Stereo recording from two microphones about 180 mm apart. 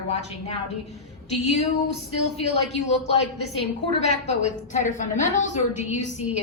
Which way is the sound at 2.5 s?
35° left (ahead or behind).